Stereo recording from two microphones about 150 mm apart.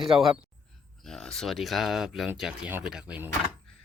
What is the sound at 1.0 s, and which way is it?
Speech, centre (ahead or behind).